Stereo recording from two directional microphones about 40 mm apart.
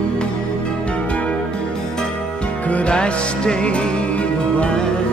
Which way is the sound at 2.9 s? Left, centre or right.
Left.